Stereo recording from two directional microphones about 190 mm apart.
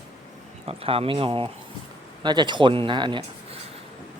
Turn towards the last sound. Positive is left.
turn(degrees=-25)  # may be behind; listen again after turning